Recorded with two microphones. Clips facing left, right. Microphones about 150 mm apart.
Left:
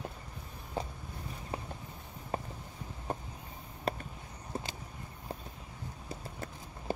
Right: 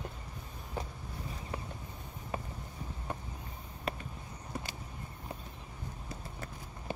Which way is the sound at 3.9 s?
35° left (ahead or behind).